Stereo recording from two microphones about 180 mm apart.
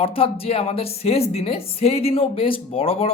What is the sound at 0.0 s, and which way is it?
A woman's voice, 30° left (ahead or behind).